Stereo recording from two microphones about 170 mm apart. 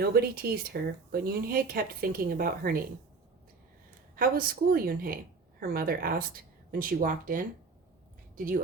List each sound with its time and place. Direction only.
0.0 s speech: 65° right (ahead or behind)
4.1 s a woman's voice: 60° right (ahead or behind)